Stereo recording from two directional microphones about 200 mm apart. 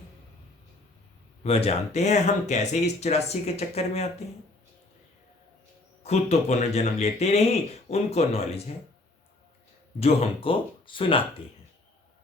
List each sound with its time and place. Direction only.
1.5 s speech: 30° left (ahead or behind)
6.0 s speech: 30° left (ahead or behind)
10.0 s speech: 30° left (ahead or behind)